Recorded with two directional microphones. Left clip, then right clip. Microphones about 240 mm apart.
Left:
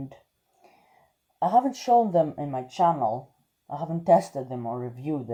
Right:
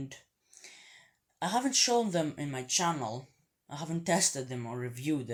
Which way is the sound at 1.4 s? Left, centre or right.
Centre.